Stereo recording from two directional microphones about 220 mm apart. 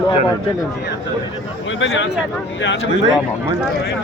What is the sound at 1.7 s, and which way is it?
Speech, 60° left (ahead or behind).